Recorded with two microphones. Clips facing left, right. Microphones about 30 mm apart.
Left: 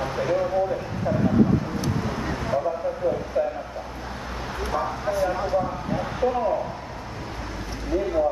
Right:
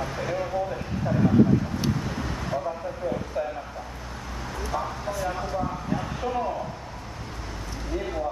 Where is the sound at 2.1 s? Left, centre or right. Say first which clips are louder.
Left 4 dB; centre.